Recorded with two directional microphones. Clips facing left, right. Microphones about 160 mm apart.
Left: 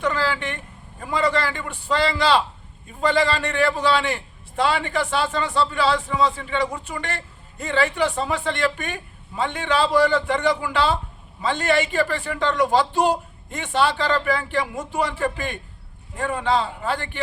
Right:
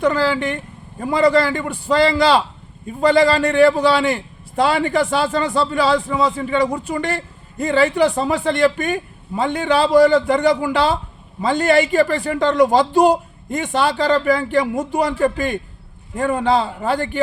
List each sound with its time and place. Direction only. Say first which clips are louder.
0.0 s a man's voice: right 6 dB; 35° right (ahead or behind)